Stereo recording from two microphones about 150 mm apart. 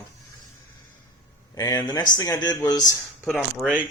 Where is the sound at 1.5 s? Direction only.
25° left (ahead or behind).